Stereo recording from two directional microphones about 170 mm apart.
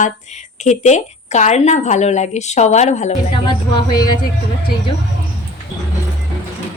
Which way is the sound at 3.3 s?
25° left (ahead or behind).